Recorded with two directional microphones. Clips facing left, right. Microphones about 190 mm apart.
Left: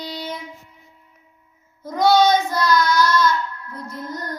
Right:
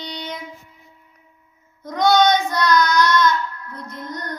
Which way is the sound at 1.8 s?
5° left (ahead or behind).